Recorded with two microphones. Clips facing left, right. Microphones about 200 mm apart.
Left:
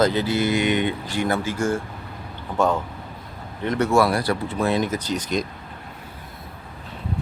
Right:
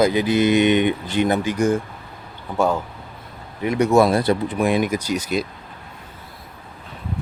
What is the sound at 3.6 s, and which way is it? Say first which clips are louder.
Speech: right 3 dB; 10° right (ahead or behind).